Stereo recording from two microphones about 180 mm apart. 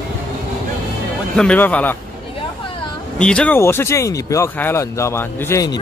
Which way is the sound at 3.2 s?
5° left (ahead or behind).